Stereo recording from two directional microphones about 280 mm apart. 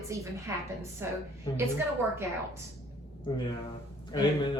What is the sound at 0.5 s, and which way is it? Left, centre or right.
Speech, centre.